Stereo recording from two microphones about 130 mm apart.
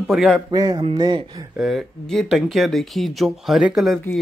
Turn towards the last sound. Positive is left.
turn(degrees=-5)  # may be behind; listen again after turning